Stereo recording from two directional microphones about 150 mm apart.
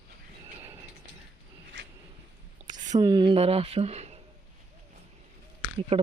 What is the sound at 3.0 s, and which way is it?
Speech, 30° right (ahead or behind).